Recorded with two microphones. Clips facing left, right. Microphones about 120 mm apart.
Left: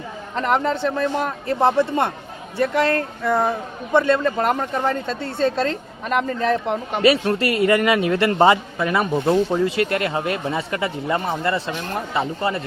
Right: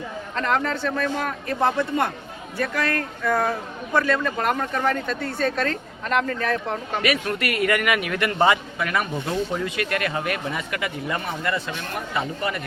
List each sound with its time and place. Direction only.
0.3 s speech: 20° left (ahead or behind)